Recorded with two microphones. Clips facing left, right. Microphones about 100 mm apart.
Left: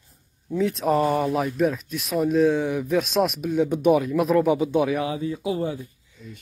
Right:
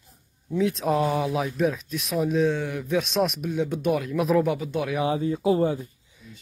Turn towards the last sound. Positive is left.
turn(degrees=-5)  # may be behind; listen again after turning